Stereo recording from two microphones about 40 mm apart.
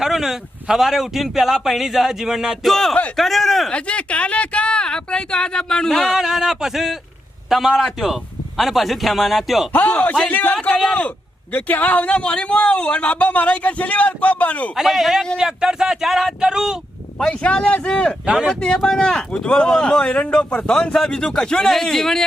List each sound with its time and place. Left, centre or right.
0.0 s speech: centre
2.6 s speech: centre
3.7 s speech: left
5.9 s speech: centre
7.9 s speech: centre
9.7 s a man's voice: left
14.8 s speech: centre
15.4 s speech: centre
17.4 s speech: left
18.8 s speech: centre